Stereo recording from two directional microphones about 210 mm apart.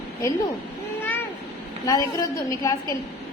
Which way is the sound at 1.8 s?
15° left (ahead or behind).